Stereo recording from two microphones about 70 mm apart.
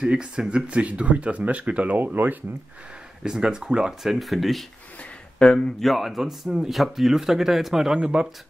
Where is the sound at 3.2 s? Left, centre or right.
Centre.